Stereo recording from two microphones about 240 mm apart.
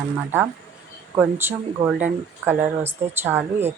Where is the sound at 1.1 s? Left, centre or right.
Centre.